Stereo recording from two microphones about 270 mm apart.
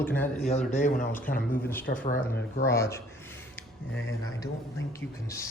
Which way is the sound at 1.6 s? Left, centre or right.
Centre.